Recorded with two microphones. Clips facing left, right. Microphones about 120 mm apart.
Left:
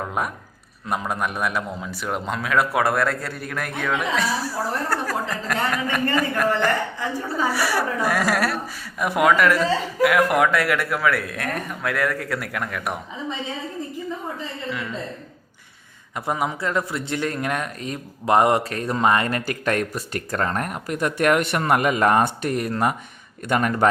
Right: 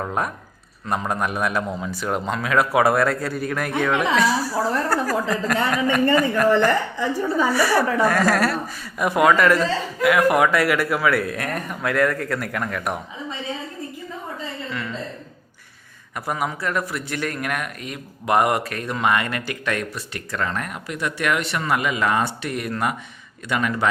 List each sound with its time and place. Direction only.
0.0 s a sound: 5° left (ahead or behind)
0.9 s speech: 5° left (ahead or behind)
16.1 s speech: 20° left (ahead or behind)
23.5 s a man's voice: 45° left (ahead or behind)